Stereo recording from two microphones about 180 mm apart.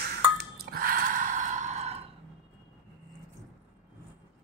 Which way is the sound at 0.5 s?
55° right (ahead or behind).